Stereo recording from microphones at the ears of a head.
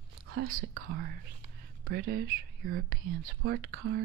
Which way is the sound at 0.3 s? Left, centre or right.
Right.